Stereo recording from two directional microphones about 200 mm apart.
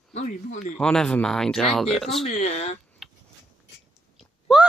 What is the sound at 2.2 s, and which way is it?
Speech, 30° left (ahead or behind).